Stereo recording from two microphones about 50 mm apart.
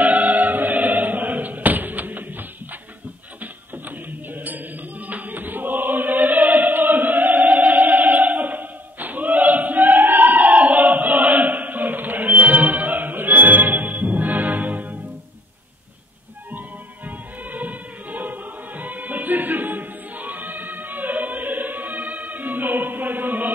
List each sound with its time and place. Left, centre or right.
0.0 s choir: right
5.0 s choir: right
17.5 s music: right